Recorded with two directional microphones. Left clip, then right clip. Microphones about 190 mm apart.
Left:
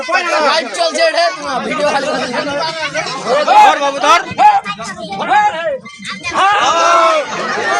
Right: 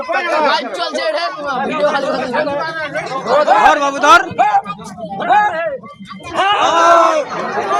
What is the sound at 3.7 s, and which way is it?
Speech, 50° right (ahead or behind).